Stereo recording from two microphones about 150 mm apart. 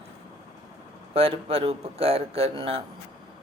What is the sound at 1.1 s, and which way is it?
Speech, 40° right (ahead or behind).